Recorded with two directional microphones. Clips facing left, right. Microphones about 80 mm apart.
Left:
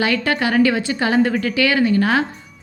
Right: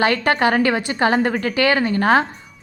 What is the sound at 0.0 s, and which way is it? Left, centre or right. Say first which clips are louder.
Speech: right 2 dB; right.